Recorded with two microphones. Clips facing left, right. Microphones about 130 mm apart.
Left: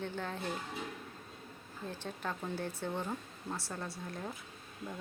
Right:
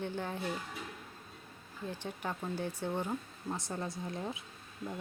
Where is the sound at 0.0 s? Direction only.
15° right (ahead or behind).